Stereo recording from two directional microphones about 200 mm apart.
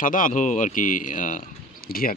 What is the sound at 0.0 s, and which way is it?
Speech, 40° left (ahead or behind).